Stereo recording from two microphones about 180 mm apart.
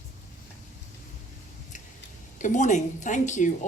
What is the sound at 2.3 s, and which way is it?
A woman's voice, 45° left (ahead or behind).